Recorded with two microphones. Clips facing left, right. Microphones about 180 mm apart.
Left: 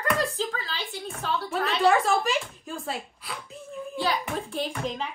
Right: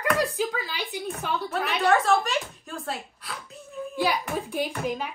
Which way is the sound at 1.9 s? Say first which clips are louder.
Right 3 dB; centre (ahead or behind).